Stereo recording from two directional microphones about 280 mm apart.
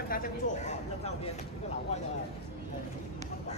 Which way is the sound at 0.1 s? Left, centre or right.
Left.